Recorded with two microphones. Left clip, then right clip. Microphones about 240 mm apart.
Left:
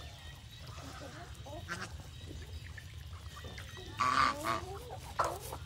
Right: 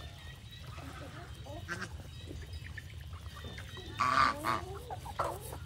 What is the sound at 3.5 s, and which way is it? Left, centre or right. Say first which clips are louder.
Goose: right 2 dB; centre.